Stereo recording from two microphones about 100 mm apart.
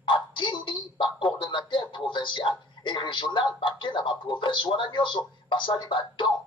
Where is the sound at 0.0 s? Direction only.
55° left (ahead or behind).